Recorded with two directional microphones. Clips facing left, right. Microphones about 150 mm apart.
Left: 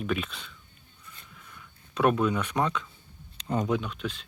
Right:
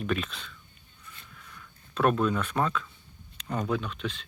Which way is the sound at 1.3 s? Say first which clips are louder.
Even; 5° left (ahead or behind).